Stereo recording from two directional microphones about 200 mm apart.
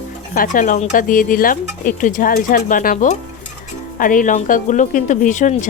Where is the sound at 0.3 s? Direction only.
40° left (ahead or behind).